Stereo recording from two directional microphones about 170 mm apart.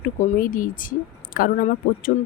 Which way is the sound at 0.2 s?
50° left (ahead or behind).